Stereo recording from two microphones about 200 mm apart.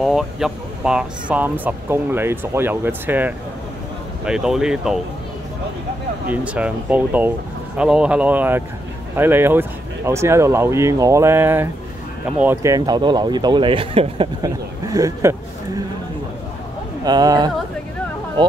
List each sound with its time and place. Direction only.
0.0 s speech: centre (ahead or behind)
6.2 s speech: 5° right (ahead or behind)
17.0 s speech: 20° right (ahead or behind)